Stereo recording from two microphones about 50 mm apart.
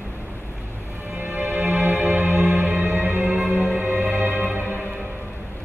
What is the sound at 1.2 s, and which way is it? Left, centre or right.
Music, right.